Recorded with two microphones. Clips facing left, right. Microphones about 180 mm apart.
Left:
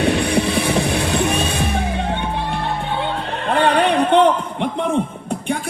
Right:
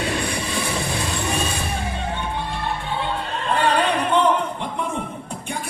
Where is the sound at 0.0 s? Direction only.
70° left (ahead or behind).